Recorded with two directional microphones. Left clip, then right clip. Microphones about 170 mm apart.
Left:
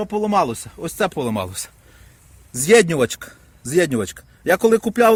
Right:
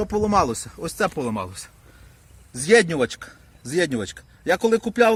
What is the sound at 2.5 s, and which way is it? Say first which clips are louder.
Speech: left 3 dB; 90° left.